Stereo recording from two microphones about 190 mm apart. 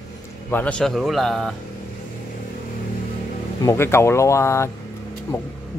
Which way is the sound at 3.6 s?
15° left (ahead or behind).